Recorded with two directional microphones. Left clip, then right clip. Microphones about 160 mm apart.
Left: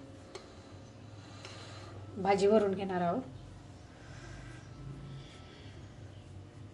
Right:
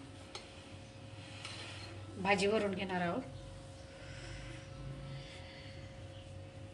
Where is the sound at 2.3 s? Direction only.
40° left (ahead or behind).